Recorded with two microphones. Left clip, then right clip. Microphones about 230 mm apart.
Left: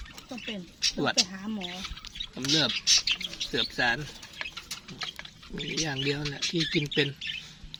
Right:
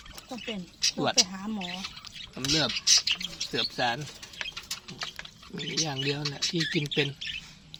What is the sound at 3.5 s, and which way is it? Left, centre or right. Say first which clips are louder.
Speech: left 2 dB; centre.